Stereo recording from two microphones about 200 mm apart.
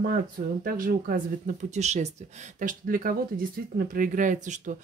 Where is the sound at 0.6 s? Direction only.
45° right (ahead or behind).